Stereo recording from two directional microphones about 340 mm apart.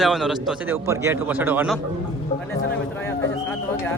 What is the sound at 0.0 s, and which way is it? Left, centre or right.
A man's voice, centre.